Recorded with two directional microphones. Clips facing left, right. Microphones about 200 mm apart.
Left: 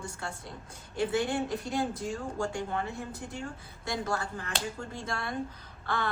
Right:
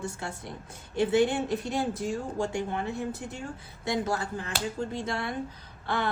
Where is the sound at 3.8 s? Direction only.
20° right (ahead or behind).